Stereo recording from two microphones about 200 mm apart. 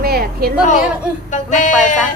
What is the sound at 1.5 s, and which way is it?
Speech, 40° left (ahead or behind).